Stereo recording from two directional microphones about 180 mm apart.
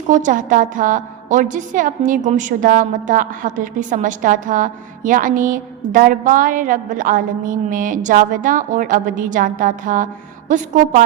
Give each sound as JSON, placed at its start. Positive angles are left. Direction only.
{"t": 0.1, "sound": "a woman's voice", "side_deg": -45}